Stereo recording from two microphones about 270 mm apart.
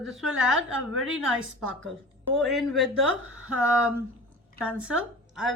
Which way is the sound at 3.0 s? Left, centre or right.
Right.